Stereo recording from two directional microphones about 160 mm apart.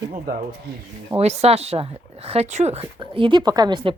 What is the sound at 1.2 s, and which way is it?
Speech, 40° right (ahead or behind).